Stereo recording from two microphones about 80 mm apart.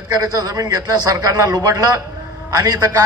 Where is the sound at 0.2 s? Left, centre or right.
Right.